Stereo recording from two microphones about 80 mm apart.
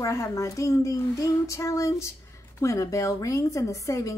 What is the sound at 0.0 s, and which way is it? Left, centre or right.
A woman's voice, left.